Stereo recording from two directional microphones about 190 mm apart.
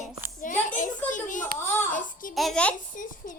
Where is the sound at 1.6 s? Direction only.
10° left (ahead or behind).